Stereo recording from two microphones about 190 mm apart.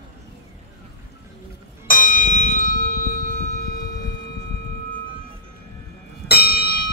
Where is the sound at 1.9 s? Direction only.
50° left (ahead or behind).